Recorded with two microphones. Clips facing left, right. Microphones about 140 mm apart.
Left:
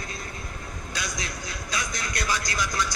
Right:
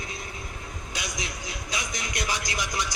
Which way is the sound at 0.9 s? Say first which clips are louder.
Left 1 dB; 15° right (ahead or behind).